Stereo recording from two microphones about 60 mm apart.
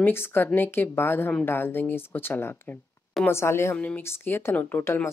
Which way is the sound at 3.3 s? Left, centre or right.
Left.